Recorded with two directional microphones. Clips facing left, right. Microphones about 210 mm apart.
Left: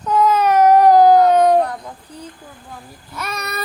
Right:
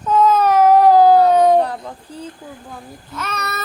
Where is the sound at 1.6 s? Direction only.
30° right (ahead or behind).